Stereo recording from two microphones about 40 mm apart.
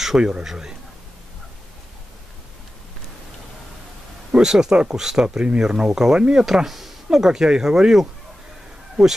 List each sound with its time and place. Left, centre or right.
0.4 s speech: centre
4.4 s speech: centre
5.2 s speech: right
6.1 s speech: right
6.4 s speech: centre